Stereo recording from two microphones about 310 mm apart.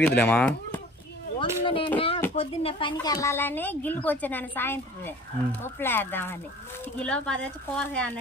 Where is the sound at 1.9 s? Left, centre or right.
Centre.